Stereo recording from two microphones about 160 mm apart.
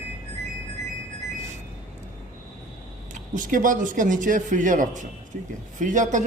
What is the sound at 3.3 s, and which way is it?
A man's voice, 55° right (ahead or behind).